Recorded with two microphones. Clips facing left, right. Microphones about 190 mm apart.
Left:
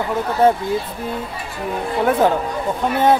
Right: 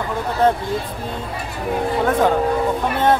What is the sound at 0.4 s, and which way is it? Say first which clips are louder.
Speech: left 2 dB; 10° left (ahead or behind).